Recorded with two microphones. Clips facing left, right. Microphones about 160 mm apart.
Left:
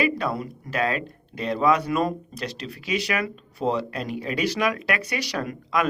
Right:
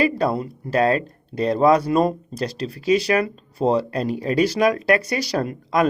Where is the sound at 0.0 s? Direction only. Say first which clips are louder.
Right 5 dB; 35° right (ahead or behind).